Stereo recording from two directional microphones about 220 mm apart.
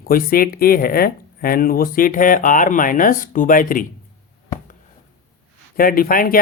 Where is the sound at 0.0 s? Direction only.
40° left (ahead or behind).